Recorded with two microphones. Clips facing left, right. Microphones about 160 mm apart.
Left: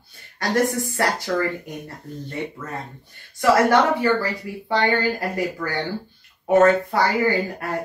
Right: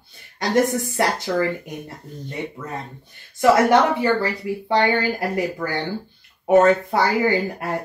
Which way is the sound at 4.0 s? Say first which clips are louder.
Right 1 dB; 20° right (ahead or behind).